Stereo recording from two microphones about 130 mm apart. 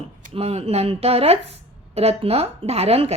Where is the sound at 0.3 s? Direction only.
50° right (ahead or behind).